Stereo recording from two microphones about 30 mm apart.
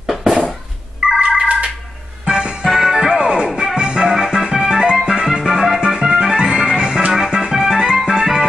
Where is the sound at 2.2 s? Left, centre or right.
Right.